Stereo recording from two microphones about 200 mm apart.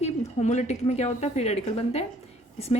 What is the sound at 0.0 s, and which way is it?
A woman's voice, 35° left (ahead or behind).